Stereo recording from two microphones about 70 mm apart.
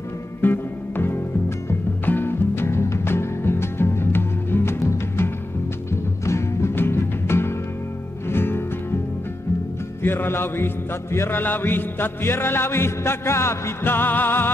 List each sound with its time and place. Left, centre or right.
0.4 s music: left
10.0 s music: left